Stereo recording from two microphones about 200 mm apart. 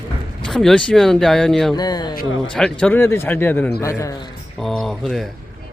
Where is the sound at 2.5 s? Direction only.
5° left (ahead or behind).